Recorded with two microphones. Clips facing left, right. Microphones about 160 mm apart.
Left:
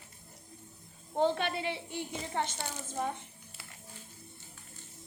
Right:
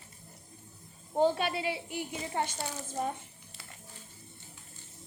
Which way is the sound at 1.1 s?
10° right (ahead or behind).